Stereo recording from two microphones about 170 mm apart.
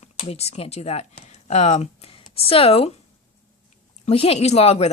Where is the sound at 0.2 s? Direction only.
35° left (ahead or behind).